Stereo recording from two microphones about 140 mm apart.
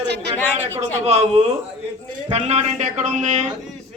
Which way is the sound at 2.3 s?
50° right (ahead or behind).